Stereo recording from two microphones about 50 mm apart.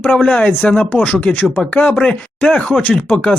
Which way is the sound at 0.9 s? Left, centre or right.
Left.